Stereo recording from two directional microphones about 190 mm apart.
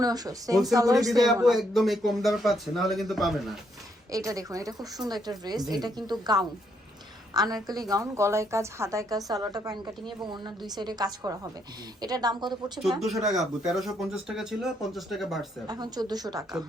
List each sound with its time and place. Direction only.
0.0 s a woman's voice: 20° right (ahead or behind)
1.5 s speech: centre (ahead or behind)
4.3 s a woman's voice: 20° right (ahead or behind)
13.0 s speech: centre (ahead or behind)
15.6 s a woman's voice: 20° right (ahead or behind)